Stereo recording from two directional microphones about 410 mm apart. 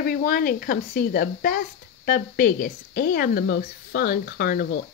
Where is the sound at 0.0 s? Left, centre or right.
Left.